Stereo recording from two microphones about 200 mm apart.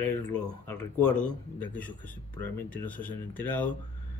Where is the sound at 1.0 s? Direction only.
5° left (ahead or behind).